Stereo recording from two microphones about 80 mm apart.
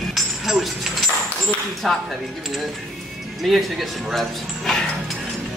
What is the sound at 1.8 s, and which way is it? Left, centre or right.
Speech, centre.